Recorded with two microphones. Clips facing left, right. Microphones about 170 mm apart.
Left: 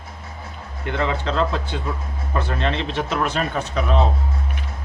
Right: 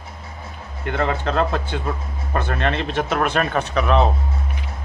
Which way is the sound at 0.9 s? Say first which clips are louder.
Right 1 dB; 50° right (ahead or behind).